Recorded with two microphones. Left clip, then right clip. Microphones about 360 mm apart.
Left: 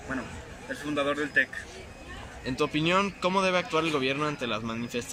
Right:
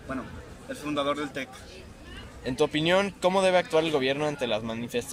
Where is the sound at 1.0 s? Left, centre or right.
Centre.